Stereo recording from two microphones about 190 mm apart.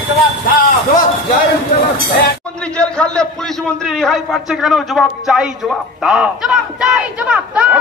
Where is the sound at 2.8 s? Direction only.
5° left (ahead or behind).